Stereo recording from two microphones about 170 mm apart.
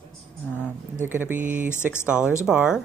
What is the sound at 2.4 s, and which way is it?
Speech, 5° right (ahead or behind).